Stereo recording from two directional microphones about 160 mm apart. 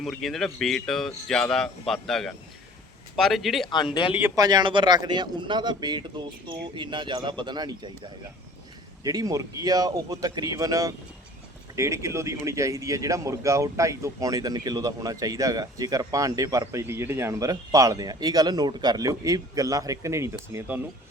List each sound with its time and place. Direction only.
0.0 s speech: centre (ahead or behind)
3.7 s a man's voice: 30° left (ahead or behind)
4.2 s speech: 25° right (ahead or behind)